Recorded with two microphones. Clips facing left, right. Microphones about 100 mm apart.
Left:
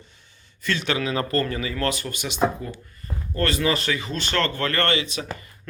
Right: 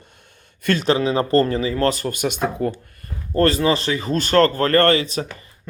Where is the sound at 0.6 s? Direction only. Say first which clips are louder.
Right 7 dB; 40° right (ahead or behind).